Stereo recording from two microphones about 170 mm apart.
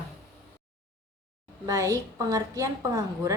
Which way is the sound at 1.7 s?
20° right (ahead or behind).